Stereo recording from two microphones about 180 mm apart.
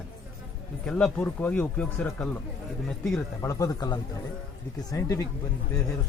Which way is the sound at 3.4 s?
15° left (ahead or behind).